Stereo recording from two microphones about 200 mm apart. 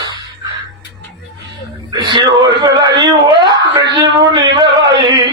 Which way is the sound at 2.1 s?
20° right (ahead or behind).